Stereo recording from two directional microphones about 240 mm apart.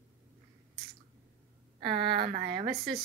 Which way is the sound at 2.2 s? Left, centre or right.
Right.